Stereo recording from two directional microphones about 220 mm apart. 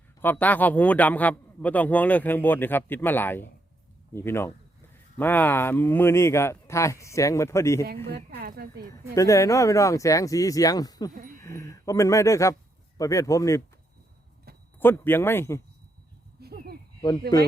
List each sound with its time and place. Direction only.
0.2 s a man's voice: 10° left (ahead or behind)
8.3 s speech: 45° right (ahead or behind)
9.1 s a man's voice: 15° left (ahead or behind)
14.8 s a man's voice: 10° left (ahead or behind)
16.4 s a sound: 45° right (ahead or behind)